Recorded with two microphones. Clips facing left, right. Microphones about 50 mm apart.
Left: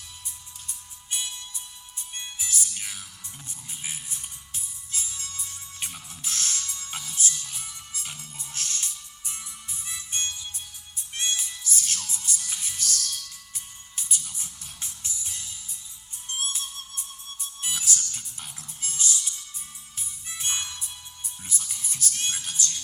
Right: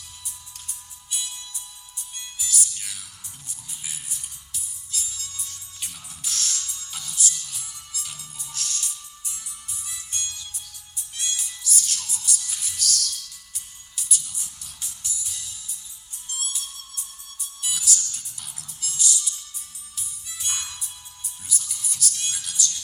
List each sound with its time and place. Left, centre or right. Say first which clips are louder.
1.1 s music: left 1 dB; left